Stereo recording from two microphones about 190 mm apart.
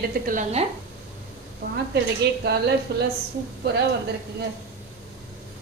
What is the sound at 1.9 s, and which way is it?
Speech, 60° right (ahead or behind).